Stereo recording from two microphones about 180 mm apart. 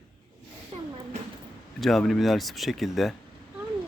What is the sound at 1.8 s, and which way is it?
Speech, centre (ahead or behind).